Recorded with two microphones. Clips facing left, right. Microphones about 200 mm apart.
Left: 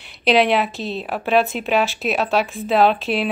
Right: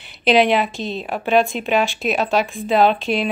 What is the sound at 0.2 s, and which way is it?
A woman's voice, centre (ahead or behind).